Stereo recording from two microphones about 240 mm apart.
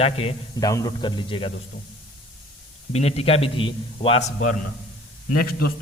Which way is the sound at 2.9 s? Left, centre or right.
Left.